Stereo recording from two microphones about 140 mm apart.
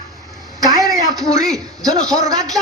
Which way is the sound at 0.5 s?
25° right (ahead or behind).